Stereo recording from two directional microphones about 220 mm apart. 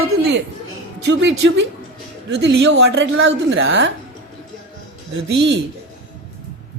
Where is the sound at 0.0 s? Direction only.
55° right (ahead or behind).